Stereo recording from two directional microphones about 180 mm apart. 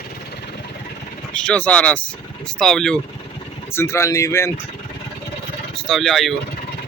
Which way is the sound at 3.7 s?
15° left (ahead or behind).